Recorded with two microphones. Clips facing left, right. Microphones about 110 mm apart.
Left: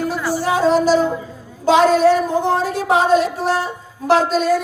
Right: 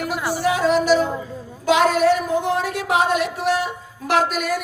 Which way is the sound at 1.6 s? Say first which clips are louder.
Left 4 dB; 30° left (ahead or behind).